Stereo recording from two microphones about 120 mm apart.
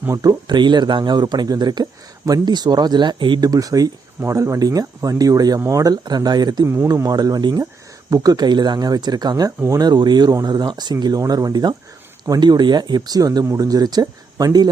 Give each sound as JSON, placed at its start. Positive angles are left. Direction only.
{"t": 0.2, "sound": "speech", "side_deg": -35}